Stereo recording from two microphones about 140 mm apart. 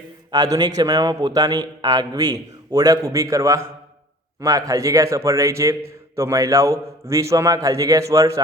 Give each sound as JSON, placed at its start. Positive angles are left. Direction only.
{"t": 0.3, "sound": "a man's voice", "side_deg": -25}